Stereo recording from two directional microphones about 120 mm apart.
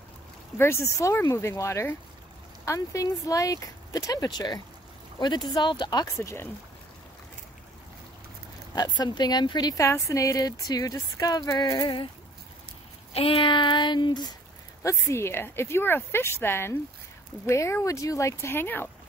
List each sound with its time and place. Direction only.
0.6 s a woman's voice: 20° left (ahead or behind); by 6.0 s 35° left (ahead or behind)
6.1 s speech: 20° left (ahead or behind)
8.7 s a woman's voice: 35° left (ahead or behind)
13.1 s a woman's voice: 50° left (ahead or behind)
14.8 s speech: 25° left (ahead or behind)